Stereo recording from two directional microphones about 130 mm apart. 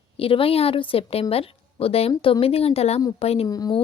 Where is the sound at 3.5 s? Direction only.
30° left (ahead or behind).